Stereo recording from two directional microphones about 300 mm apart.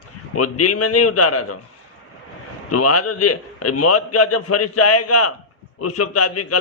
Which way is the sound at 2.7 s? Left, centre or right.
Left.